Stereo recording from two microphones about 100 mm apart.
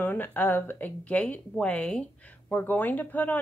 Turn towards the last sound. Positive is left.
turn(degrees=15)  # may be behind; listen again after turning